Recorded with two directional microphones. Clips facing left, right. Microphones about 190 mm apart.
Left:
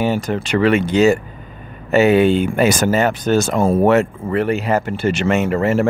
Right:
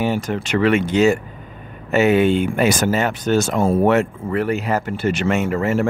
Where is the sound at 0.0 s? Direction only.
35° left (ahead or behind).